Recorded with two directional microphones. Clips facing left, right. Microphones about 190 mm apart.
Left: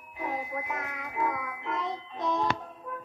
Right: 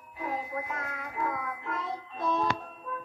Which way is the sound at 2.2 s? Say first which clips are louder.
Even; 20° left (ahead or behind).